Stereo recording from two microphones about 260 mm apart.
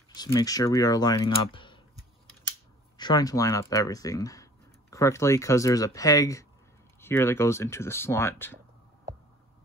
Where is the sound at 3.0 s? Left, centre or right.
Centre.